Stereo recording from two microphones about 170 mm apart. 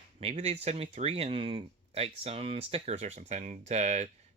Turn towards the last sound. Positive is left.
turn(degrees=-40)  # may be behind; listen again after turning